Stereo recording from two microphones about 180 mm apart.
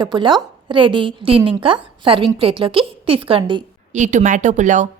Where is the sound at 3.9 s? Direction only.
40° right (ahead or behind).